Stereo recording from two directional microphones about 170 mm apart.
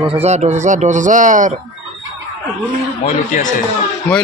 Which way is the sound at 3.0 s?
45° left (ahead or behind).